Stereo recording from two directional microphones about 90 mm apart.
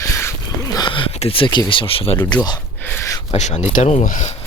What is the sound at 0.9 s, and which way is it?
Speech, 75° left (ahead or behind).